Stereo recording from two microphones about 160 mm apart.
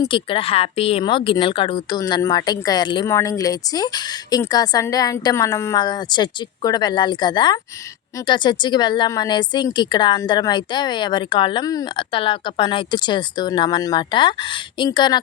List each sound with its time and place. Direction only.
0.0 s speech: 35° left (ahead or behind)